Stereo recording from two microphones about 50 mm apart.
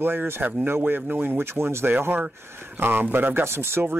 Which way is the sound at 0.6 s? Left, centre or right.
Right.